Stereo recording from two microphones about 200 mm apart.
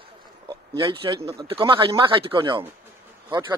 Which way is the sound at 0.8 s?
25° right (ahead or behind).